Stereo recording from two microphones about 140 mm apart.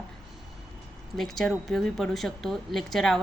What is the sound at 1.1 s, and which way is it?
Speech, centre (ahead or behind).